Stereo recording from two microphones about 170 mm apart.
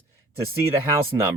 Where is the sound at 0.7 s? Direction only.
15° right (ahead or behind).